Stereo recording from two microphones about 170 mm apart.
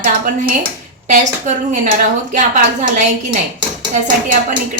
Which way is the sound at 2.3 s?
50° right (ahead or behind).